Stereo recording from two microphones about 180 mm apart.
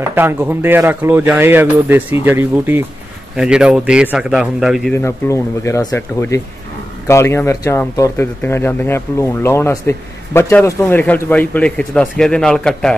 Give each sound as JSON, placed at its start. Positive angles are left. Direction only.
{"t": 0.1, "sound": "a man's voice", "side_deg": -10}
{"t": 4.9, "sound": "speech", "side_deg": 15}